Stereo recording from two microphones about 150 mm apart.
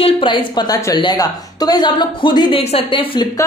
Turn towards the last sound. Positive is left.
turn(degrees=35)  # may be behind; listen again after turning